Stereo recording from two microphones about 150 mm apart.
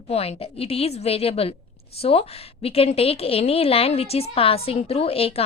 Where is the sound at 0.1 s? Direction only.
40° left (ahead or behind).